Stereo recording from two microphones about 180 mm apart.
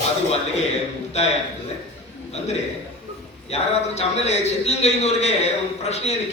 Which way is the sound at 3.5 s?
35° left (ahead or behind).